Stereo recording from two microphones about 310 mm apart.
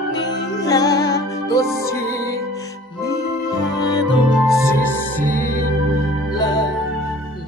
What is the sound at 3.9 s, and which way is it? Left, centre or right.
Music, centre.